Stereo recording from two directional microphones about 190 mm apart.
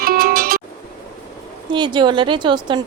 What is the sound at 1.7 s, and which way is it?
A woman's voice, 25° right (ahead or behind).